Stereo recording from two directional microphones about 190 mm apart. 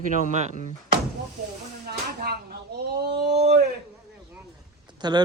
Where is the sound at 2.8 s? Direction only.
60° right (ahead or behind).